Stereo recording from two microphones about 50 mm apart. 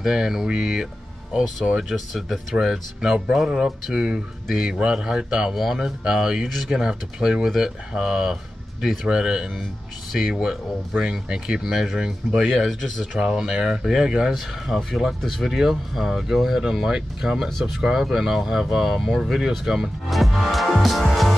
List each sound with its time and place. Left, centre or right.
0.0 s speech: centre
2.5 s speech: centre
5.5 s speech: centre
13.2 s speech: centre